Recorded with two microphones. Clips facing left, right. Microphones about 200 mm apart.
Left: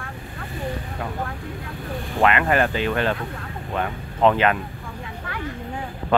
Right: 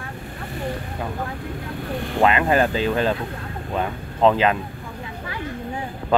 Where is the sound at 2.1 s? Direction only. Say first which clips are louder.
Right 1 dB; 20° right (ahead or behind).